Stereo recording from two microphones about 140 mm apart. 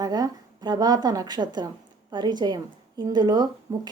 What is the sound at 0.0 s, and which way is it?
A woman's voice, 30° right (ahead or behind).